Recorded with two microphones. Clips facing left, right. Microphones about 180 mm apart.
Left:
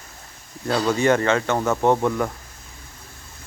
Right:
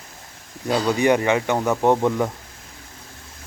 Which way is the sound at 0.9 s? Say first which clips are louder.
Right 1 dB; 15° right (ahead or behind).